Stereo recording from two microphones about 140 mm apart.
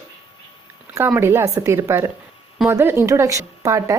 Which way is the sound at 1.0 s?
15° right (ahead or behind).